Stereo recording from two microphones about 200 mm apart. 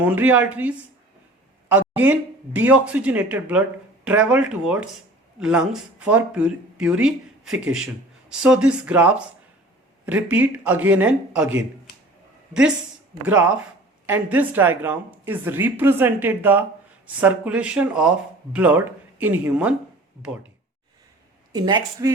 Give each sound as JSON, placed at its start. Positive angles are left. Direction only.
{"t": 0.0, "sound": "a woman's voice", "side_deg": -10}
{"t": 1.7, "sound": "a sound", "side_deg": -10}
{"t": 2.6, "sound": "a woman's voice", "side_deg": -5}
{"t": 13.2, "sound": "a woman's voice", "side_deg": -5}
{"t": 21.5, "sound": "speech", "side_deg": -20}